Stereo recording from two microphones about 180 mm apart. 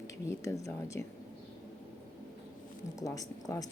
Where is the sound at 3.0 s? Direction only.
20° left (ahead or behind).